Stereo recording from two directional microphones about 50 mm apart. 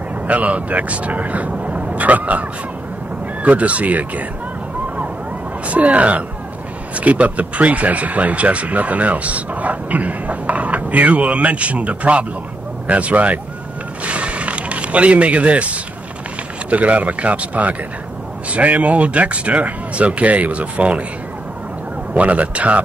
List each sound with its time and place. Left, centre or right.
0.3 s speech: right
3.4 s speech: right
5.7 s speech: right
14.0 s a sound: right
16.7 s speech: right
22.1 s speech: right